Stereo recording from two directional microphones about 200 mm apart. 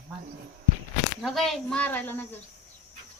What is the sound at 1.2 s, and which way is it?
A woman's voice, centre (ahead or behind).